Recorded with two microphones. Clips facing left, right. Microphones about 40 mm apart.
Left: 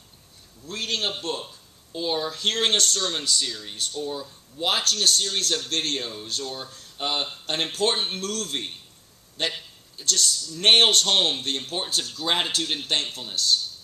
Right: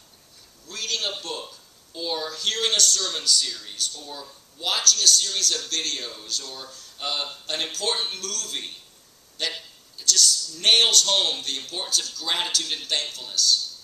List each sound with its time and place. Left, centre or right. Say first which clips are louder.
0.7 s a man's voice: left 1 dB; left
1.4 s a man's voice: even; centre